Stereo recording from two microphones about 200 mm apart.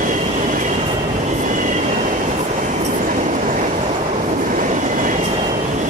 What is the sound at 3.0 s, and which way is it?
Train, 40° right (ahead or behind).